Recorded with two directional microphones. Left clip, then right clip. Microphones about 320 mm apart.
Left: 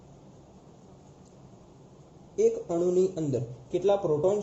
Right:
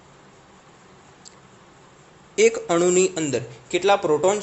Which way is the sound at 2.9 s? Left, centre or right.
Centre.